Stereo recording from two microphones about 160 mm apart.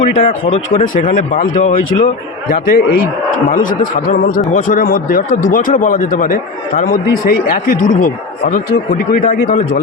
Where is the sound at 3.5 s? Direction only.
55° left (ahead or behind).